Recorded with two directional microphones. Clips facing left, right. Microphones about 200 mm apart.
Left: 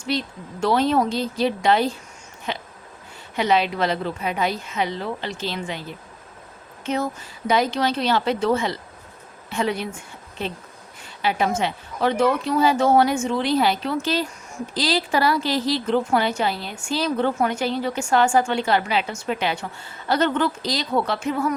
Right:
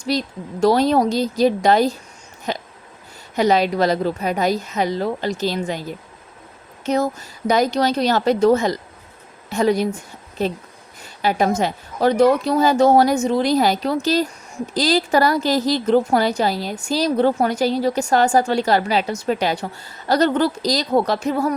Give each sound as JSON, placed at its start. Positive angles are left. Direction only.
{"t": 0.0, "sound": "a woman's voice", "side_deg": -40}
{"t": 6.8, "sound": "a woman's voice", "side_deg": -40}